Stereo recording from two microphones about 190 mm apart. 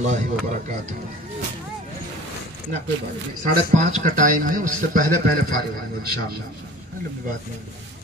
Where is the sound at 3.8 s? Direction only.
40° right (ahead or behind).